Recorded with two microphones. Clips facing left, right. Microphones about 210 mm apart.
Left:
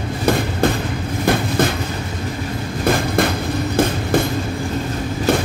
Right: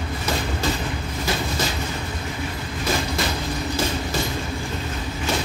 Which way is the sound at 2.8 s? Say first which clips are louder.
Left 7 dB; 55° left (ahead or behind).